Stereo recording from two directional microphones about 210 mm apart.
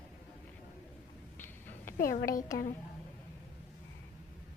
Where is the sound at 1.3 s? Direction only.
10° left (ahead or behind).